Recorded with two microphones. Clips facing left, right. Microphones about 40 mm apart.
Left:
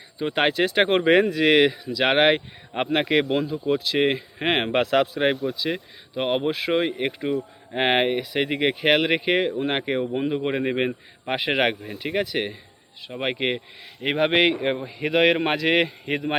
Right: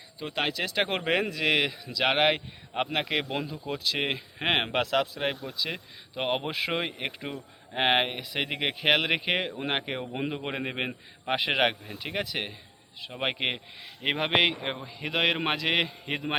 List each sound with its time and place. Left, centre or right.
0.3 s speech: left
0.9 s speech: centre
4.7 s speech: centre
5.5 s speech: centre